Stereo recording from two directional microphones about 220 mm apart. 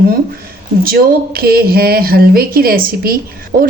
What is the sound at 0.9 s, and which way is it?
A woman's voice, 45° right (ahead or behind).